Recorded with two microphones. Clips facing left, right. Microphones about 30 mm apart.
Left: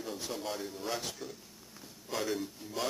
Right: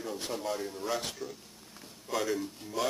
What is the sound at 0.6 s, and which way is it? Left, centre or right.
Speech, centre.